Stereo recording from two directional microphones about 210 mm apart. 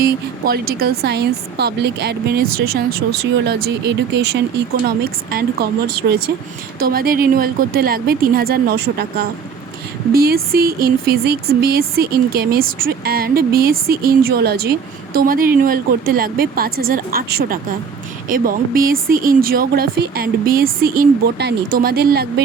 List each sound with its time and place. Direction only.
0.0 s speech: 45° right (ahead or behind)